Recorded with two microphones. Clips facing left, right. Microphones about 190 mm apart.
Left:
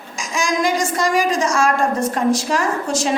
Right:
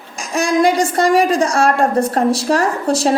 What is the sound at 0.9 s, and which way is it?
A woman's voice, 30° right (ahead or behind).